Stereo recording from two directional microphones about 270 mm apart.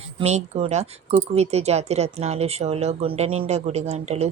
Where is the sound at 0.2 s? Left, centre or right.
Right.